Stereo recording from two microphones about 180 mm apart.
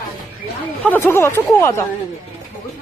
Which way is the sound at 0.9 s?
10° left (ahead or behind).